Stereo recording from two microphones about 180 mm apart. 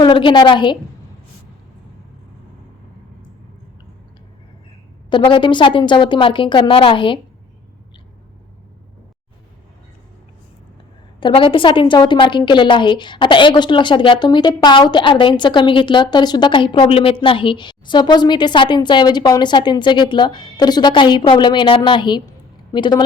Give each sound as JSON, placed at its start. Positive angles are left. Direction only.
{"t": 0.0, "sound": "a woman's voice", "side_deg": 25}
{"t": 5.0, "sound": "a woman's voice", "side_deg": 25}
{"t": 11.2, "sound": "a woman's voice", "side_deg": 30}